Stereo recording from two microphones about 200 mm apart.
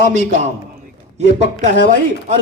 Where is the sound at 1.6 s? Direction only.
40° right (ahead or behind).